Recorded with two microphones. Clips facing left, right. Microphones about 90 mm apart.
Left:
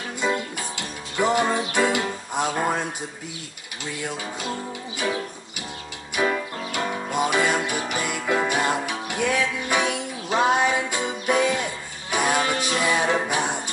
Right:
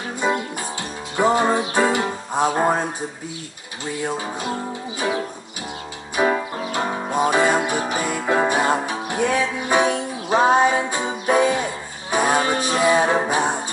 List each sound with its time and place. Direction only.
0.2 s music: 25° right (ahead or behind)
4.0 s music: 25° right (ahead or behind)